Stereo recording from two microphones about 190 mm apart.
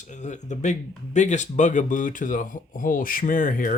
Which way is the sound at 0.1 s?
40° left (ahead or behind).